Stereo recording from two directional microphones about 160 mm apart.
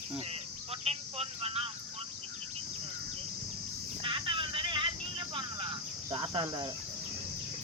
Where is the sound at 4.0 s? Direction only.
35° right (ahead or behind).